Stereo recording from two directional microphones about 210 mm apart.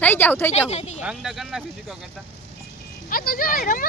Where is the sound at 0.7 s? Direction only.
30° left (ahead or behind).